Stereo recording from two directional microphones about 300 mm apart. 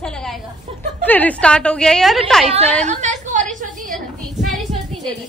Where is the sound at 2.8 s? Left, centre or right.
Right.